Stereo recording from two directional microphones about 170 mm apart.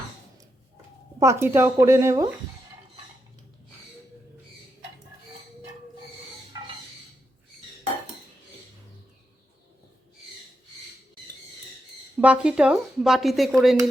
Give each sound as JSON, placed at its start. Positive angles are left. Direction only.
{"t": 1.2, "sound": "speech", "side_deg": -15}
{"t": 12.1, "sound": "speech", "side_deg": -5}